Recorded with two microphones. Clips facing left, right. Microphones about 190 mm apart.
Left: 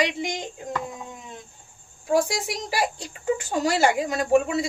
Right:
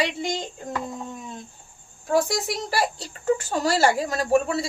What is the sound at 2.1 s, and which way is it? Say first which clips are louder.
Speech: even; 10° left (ahead or behind).